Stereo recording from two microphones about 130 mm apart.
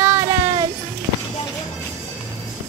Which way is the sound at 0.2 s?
20° right (ahead or behind).